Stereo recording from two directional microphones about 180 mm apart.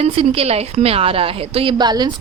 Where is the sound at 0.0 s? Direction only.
35° right (ahead or behind).